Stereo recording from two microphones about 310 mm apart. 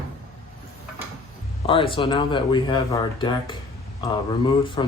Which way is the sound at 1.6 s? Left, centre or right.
Centre.